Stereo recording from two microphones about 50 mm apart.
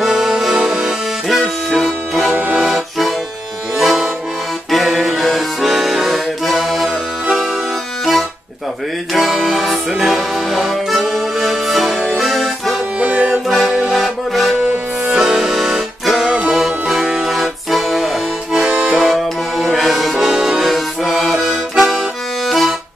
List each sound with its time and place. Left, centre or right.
0.0 s accordion: centre
2.5 s accordion: centre
3.7 s music: centre
4.6 s accordion: centre
8.0 s accordion: centre
13.0 s accordion: right
13.5 s accordion: centre
18.9 s music: centre